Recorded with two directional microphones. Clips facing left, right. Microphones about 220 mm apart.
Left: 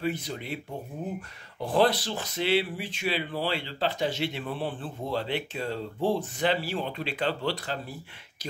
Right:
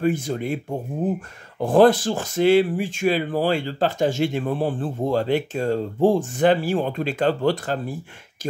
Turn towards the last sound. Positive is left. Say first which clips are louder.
# right 9 dB
turn(degrees=-45)  # may be behind; listen again after turning